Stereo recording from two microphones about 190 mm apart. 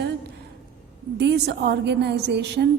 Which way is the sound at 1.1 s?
65° right (ahead or behind).